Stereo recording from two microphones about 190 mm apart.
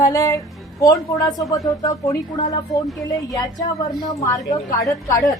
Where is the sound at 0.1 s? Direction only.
15° left (ahead or behind).